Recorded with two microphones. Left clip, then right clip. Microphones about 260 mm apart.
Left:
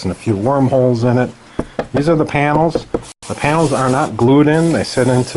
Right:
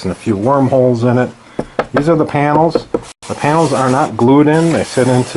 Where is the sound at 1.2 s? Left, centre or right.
Centre.